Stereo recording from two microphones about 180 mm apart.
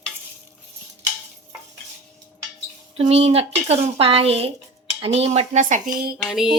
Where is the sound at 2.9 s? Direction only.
35° right (ahead or behind); by 6.2 s 55° right (ahead or behind).